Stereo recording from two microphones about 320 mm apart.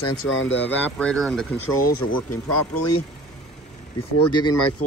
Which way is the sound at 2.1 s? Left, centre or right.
Left.